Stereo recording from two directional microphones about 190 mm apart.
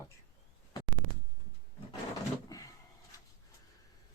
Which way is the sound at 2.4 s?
20° left (ahead or behind).